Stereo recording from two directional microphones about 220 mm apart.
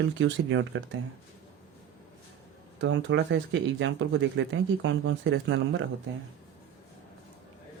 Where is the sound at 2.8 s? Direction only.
55° right (ahead or behind).